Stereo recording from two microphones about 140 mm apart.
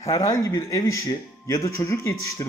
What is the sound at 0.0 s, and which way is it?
Speech, 25° left (ahead or behind).